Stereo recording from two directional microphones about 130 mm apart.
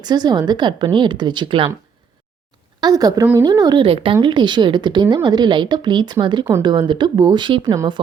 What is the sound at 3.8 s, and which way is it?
A woman's voice, 45° right (ahead or behind).